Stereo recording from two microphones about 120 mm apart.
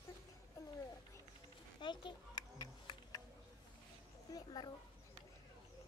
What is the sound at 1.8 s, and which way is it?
Music, 40° left (ahead or behind).